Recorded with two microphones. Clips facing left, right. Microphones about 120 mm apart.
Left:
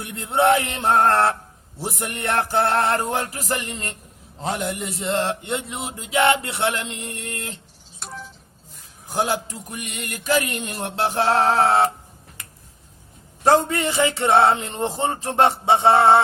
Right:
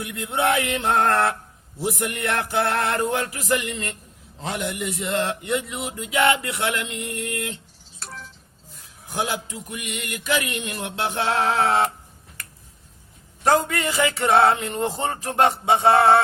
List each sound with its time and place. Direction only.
0.0 s a man's voice: 30° left (ahead or behind)
1.8 s mantra: 35° left (ahead or behind)
7.9 s a sound: 15° left (ahead or behind)
9.0 s mantra: 35° left (ahead or behind)
13.4 s a man's voice: 30° left (ahead or behind)